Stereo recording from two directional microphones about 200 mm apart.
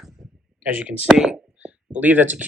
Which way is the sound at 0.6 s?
5° right (ahead or behind).